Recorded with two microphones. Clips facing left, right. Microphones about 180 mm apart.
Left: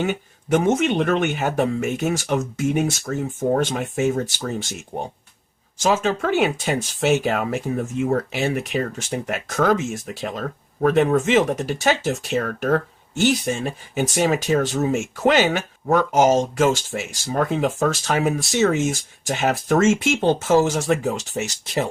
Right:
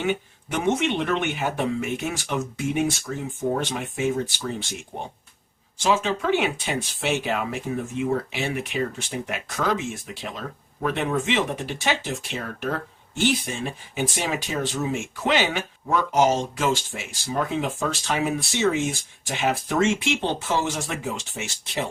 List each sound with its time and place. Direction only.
0.0 s speech: 45° left (ahead or behind)